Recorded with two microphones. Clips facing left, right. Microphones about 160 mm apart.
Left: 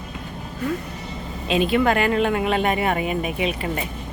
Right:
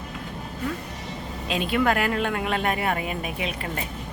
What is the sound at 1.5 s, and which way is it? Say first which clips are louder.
Speech: left 4 dB; centre (ahead or behind).